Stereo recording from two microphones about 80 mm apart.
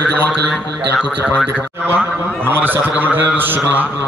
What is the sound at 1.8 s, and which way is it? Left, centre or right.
A man's voice, right.